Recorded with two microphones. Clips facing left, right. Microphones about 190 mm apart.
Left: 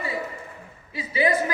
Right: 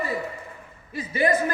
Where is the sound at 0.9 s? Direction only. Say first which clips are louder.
Right 1 dB; 50° right (ahead or behind).